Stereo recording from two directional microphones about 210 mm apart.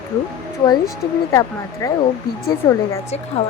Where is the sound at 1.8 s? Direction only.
15° left (ahead or behind).